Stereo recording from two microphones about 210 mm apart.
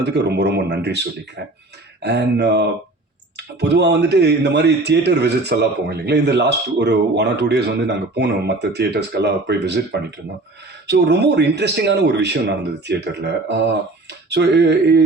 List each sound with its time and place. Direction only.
0.0 s speech: 55° right (ahead or behind)